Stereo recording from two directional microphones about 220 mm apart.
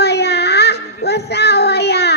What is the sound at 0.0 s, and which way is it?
Child singing, 50° left (ahead or behind).